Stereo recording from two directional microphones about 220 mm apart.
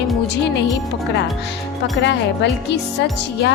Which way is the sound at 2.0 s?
55° left (ahead or behind).